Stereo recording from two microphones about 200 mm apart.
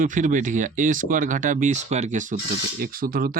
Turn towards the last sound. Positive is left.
turn(degrees=-45)  # may be behind; listen again after turning